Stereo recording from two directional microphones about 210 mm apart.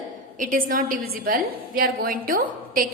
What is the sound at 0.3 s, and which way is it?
A woman's voice, 40° right (ahead or behind).